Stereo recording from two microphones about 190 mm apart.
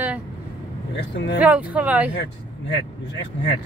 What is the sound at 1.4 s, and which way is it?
Speech, 5° right (ahead or behind).